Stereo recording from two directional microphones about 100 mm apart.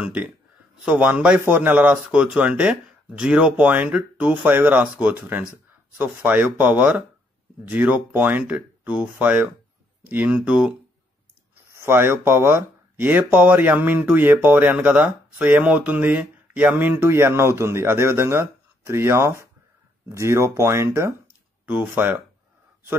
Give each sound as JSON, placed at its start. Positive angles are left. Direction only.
{"t": 0.0, "sound": "speech", "side_deg": -15}
{"t": 11.8, "sound": "speech", "side_deg": -20}
{"t": 21.6, "sound": "speech", "side_deg": -15}